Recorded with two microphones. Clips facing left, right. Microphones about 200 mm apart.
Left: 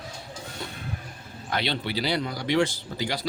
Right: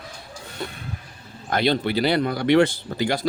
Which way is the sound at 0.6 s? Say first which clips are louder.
Right 7 dB; 60° right (ahead or behind).